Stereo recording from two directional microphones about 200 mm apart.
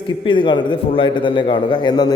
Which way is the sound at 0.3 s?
25° left (ahead or behind).